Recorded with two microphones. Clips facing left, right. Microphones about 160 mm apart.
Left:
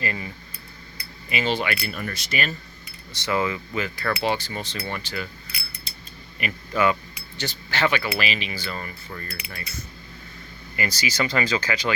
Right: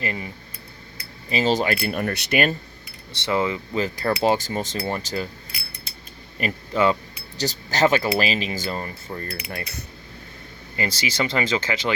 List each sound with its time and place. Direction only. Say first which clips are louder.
0.0 s speech: right 1 dB; 20° right (ahead or behind)
1.3 s speech: right 4 dB; 35° right (ahead or behind); by 2.6 s 55° right (ahead or behind)
3.1 s speech: right 2 dB; 25° right (ahead or behind)
3.8 s speech: right 5 dB; 35° right (ahead or behind)
6.4 s speech: right 2 dB; 40° right (ahead or behind)
9.4 s speech: right 4 dB; 55° right (ahead or behind)
10.8 s speech: right 1 dB; 25° right (ahead or behind)